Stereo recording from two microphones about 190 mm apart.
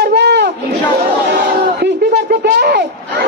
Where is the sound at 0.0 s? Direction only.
60° right (ahead or behind).